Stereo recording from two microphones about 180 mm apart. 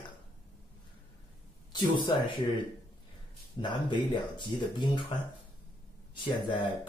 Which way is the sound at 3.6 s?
25° left (ahead or behind).